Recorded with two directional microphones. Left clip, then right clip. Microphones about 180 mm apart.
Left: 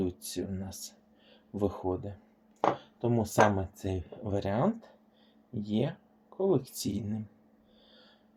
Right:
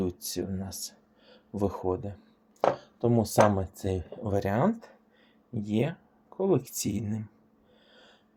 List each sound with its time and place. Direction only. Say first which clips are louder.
0.0 s speech: right 2 dB; 35° right (ahead or behind)